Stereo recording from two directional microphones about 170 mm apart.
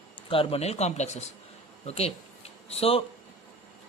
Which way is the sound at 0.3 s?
30° left (ahead or behind).